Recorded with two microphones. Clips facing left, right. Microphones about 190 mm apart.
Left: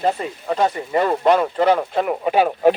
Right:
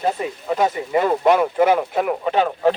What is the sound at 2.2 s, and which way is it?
Speech, 15° left (ahead or behind).